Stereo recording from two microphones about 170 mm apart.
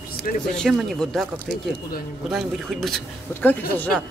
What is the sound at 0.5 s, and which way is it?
Speech, centre (ahead or behind).